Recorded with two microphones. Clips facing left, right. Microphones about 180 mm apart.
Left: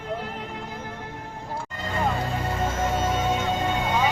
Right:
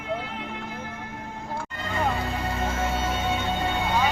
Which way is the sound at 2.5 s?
45° left (ahead or behind).